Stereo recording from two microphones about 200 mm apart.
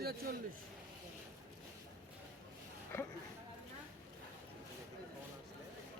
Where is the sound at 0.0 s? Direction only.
50° right (ahead or behind).